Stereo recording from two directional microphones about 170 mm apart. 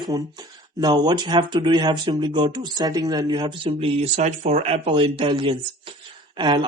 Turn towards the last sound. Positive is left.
turn(degrees=-30)  # may be behind; listen again after turning